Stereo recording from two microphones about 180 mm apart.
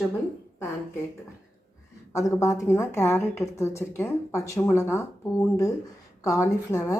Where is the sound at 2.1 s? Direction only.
15° left (ahead or behind).